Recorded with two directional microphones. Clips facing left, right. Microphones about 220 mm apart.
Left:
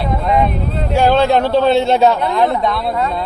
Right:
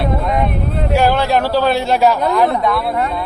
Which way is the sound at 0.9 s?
20° left (ahead or behind).